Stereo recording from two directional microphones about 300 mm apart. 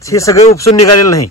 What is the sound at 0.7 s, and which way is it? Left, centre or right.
Speech, left.